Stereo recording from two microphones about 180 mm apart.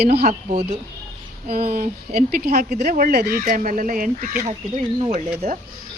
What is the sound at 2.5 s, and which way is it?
Speech, 40° right (ahead or behind).